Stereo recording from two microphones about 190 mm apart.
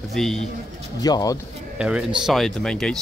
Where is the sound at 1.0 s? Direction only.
20° left (ahead or behind).